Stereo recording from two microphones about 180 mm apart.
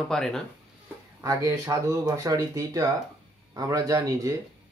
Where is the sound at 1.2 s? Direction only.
20° right (ahead or behind).